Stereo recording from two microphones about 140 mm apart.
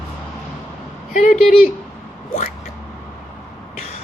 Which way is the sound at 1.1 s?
65° left (ahead or behind).